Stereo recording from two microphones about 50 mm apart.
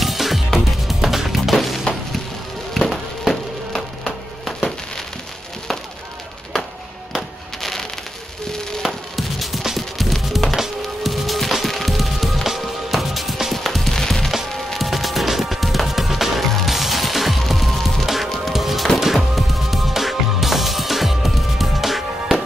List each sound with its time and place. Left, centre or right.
0.0 s music: centre
7.1 s a sound: centre
8.8 s music: centre